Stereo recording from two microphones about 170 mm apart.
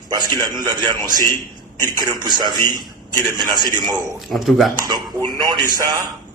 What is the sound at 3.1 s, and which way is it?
Speech, 25° right (ahead or behind).